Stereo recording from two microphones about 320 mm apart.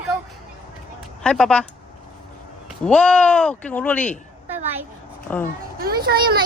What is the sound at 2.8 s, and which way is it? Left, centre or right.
Speech, centre.